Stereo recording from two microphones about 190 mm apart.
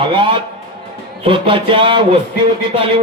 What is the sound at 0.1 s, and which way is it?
A man's voice, 25° right (ahead or behind).